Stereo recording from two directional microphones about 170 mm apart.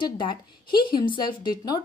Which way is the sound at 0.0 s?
25° left (ahead or behind).